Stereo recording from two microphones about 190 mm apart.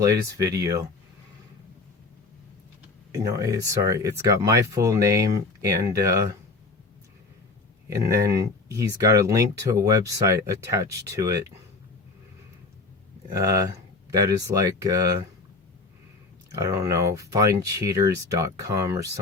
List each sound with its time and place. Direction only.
0.1 s speech: 20° right (ahead or behind)
3.1 s speech: 15° right (ahead or behind)
7.9 s speech: 15° right (ahead or behind)
13.4 s speech: 15° right (ahead or behind)
16.5 s speech: 20° right (ahead or behind)